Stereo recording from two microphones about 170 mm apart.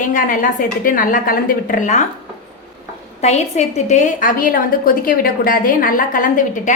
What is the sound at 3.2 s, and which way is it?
A woman's voice, 40° left (ahead or behind).